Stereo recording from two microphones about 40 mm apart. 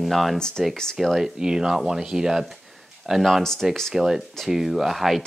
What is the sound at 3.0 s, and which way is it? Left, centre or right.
Speech, centre.